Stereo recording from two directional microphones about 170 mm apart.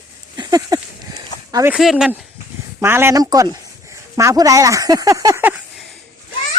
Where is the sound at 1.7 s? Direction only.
5° right (ahead or behind).